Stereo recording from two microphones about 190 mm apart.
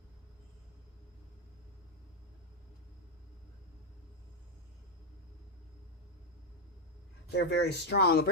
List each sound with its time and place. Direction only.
7.3 s speech: 60° left (ahead or behind)